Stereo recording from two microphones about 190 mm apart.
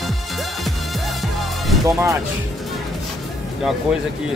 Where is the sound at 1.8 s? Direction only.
15° right (ahead or behind).